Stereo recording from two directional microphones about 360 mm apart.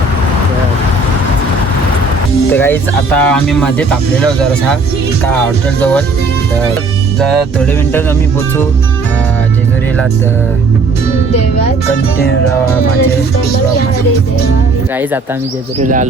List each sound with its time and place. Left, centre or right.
2.5 s speech: centre
15.8 s speech: right